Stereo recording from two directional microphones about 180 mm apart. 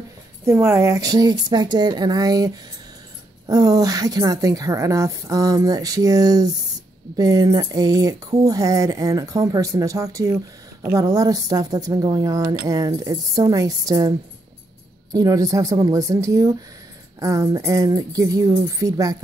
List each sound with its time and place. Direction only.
0.5 s speech: 15° right (ahead or behind)